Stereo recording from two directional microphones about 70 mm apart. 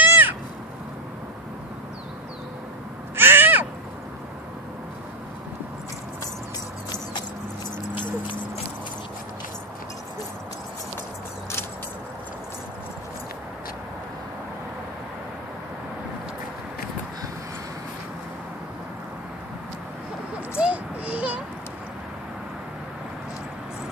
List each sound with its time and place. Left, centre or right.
0.0 s cat: right
3.2 s owl: right
20.5 s a sound: centre